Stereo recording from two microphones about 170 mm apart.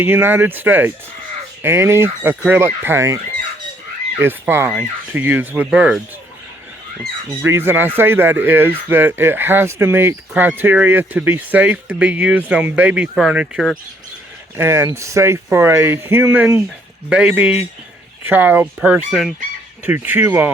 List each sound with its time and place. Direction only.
0.0 s speech: 10° right (ahead or behind)
4.2 s speech: 15° right (ahead or behind)
7.4 s speech: 15° right (ahead or behind)
14.5 s speech: 15° right (ahead or behind)